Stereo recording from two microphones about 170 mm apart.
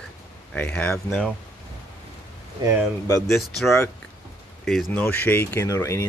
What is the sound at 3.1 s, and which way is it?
Speech, 20° left (ahead or behind).